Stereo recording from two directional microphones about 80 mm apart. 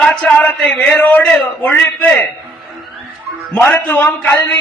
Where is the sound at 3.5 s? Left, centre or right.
Left.